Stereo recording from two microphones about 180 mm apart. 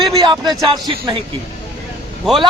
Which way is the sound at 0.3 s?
25° right (ahead or behind).